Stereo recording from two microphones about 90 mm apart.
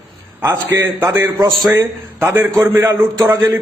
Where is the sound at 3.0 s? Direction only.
25° right (ahead or behind).